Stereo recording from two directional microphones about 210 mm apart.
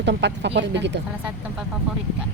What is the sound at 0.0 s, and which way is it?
Speech, 55° right (ahead or behind).